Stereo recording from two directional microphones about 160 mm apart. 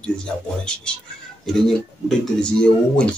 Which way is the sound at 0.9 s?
5° left (ahead or behind).